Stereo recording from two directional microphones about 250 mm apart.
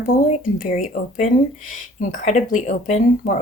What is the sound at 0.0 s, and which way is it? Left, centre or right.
Speech, left.